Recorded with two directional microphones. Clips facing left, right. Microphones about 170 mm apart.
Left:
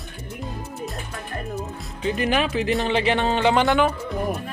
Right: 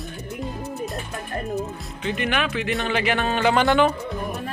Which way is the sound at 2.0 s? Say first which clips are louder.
Left 3 dB; 35° left (ahead or behind).